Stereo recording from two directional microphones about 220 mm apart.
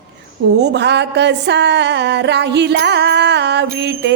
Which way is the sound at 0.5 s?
50° right (ahead or behind).